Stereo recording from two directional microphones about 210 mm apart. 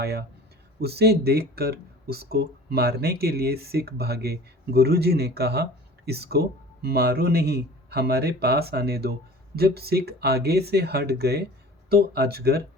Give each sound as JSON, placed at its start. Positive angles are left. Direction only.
{"t": 0.0, "sound": "speech", "side_deg": -50}